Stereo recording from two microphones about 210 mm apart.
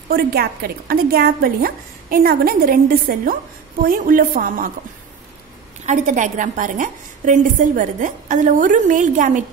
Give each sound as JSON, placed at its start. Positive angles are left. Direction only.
{"t": 0.1, "sound": "a woman's voice", "side_deg": -45}
{"t": 5.9, "sound": "a woman's voice", "side_deg": -35}